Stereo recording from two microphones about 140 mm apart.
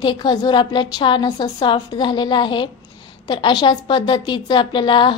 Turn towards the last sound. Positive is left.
turn(degrees=35)  # may be behind; listen again after turning